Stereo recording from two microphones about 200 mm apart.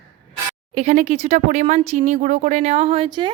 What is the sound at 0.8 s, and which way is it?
A woman's voice, 35° right (ahead or behind).